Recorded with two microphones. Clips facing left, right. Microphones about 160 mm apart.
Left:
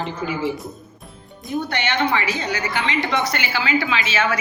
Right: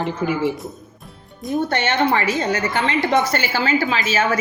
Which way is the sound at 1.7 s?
45° right (ahead or behind).